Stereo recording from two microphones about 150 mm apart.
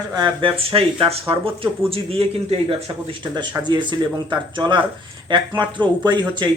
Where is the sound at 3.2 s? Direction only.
30° right (ahead or behind).